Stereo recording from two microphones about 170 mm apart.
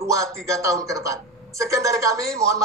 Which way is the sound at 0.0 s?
20° right (ahead or behind).